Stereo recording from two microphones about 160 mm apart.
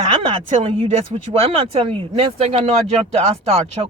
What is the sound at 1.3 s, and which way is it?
Speech, 35° right (ahead or behind).